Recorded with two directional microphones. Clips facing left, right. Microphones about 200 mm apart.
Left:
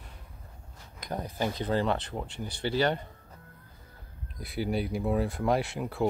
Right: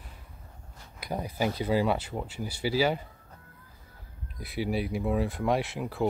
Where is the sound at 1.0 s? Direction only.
10° right (ahead or behind).